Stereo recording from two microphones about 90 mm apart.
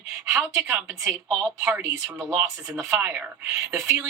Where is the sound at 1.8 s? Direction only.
30° right (ahead or behind).